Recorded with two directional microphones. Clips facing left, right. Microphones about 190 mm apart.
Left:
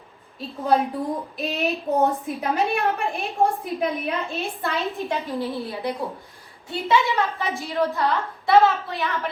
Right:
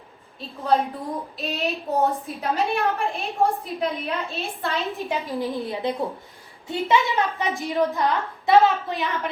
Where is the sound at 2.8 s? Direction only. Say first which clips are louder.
Even; 15° left (ahead or behind).